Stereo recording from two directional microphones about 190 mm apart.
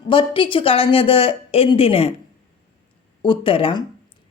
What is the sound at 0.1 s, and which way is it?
Speech, 25° left (ahead or behind).